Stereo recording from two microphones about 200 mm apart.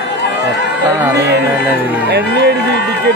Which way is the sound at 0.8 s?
10° right (ahead or behind).